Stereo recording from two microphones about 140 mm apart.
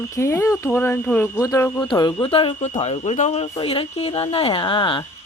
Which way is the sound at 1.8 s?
30° left (ahead or behind).